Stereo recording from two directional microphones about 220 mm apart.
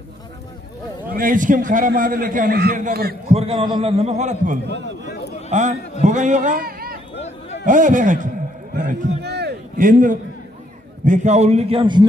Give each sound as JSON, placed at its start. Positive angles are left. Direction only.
{"t": 1.1, "sound": "a man's voice", "side_deg": -40}
{"t": 3.3, "sound": "a man's voice", "side_deg": -25}
{"t": 4.6, "sound": "a man's voice", "side_deg": -55}
{"t": 5.5, "sound": "a man's voice", "side_deg": -35}
{"t": 7.2, "sound": "a sound", "side_deg": 30}
{"t": 7.6, "sound": "a man's voice", "side_deg": -35}
{"t": 8.7, "sound": "a man's voice", "side_deg": -50}